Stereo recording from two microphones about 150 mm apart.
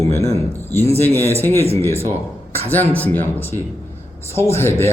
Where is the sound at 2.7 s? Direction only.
10° left (ahead or behind).